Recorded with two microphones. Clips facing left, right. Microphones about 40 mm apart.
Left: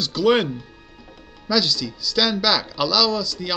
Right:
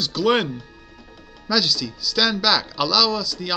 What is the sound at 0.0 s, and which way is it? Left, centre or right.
Speech, centre.